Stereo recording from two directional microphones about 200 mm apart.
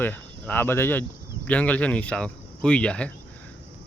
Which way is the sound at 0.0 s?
10° left (ahead or behind).